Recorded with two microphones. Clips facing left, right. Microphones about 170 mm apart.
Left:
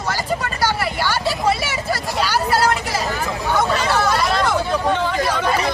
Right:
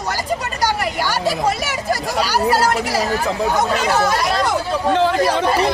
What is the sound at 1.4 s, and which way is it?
Hubbub, 40° right (ahead or behind).